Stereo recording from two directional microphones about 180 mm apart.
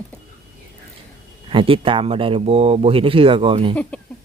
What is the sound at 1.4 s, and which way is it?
Speech, 30° right (ahead or behind).